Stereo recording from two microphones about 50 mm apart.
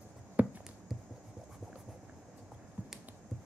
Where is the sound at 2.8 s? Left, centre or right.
Right.